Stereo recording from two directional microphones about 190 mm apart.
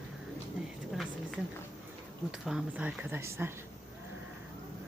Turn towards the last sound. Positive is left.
turn(degrees=-10)  # may be behind; listen again after turning